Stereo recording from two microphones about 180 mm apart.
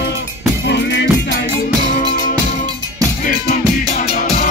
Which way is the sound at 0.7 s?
75° left (ahead or behind).